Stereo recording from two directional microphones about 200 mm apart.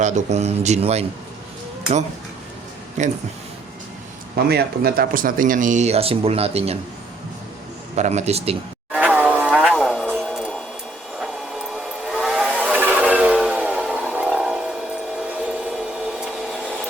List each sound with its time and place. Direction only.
0.0 s speech: 35° right (ahead or behind)
3.0 s speech: 35° right (ahead or behind)
4.4 s speech: 50° right (ahead or behind); by 6.7 s 30° right (ahead or behind)
7.9 s speech: 35° right (ahead or behind)
8.9 s a sound: 5° right (ahead or behind)
12.7 s vehicle: 10° right (ahead or behind)
15.2 s a sound: 5° right (ahead or behind)